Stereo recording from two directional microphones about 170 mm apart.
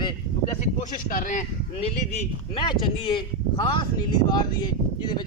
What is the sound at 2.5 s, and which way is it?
Speech, 30° left (ahead or behind).